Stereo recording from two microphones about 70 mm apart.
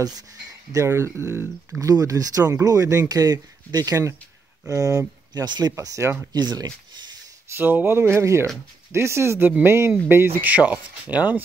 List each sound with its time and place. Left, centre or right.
0.0 s speech: right
0.8 s speech: right
1.8 s speech: right
3.9 s speech: right
5.4 s speech: right
5.7 s speech: right
6.3 s speech: right
7.5 s speech: right
10.5 s speech: right